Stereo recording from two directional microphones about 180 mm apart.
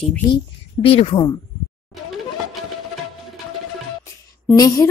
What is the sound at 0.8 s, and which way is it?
Speech, 30° left (ahead or behind).